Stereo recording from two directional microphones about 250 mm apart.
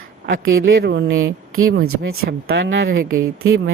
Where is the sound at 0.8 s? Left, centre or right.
Right.